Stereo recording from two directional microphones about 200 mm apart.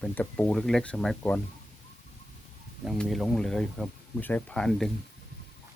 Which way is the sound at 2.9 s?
Centre (ahead or behind).